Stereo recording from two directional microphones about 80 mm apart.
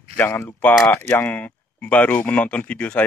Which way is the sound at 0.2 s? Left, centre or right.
Left.